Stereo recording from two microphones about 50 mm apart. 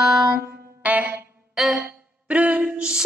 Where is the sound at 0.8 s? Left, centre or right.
Right.